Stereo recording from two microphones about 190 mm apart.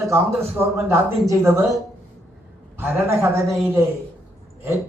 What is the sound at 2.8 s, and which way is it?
A man's voice, 15° right (ahead or behind).